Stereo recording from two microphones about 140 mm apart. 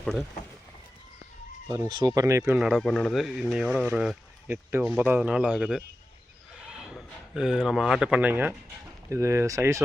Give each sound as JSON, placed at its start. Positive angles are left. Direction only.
{"t": 0.0, "sound": "speech", "side_deg": 5}
{"t": 1.7, "sound": "speech", "side_deg": -30}
{"t": 2.6, "sound": "speech", "side_deg": 0}